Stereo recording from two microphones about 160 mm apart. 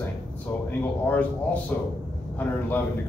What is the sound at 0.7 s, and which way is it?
A man's voice, 10° left (ahead or behind).